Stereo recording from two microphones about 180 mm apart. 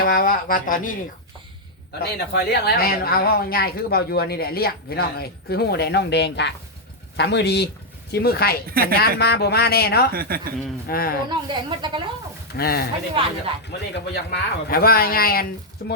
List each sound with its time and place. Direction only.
0.0 s speech: 55° left (ahead or behind)
2.0 s speech: 60° left (ahead or behind)
8.7 s speech: 55° right (ahead or behind)
9.0 s speech: 65° left (ahead or behind)
10.1 s speech: 55° right (ahead or behind)
10.8 s speech: 55° left (ahead or behind)
11.3 s speech: 25° right (ahead or behind)
12.5 s speech: 60° left (ahead or behind)
13.7 s speech: 70° left (ahead or behind)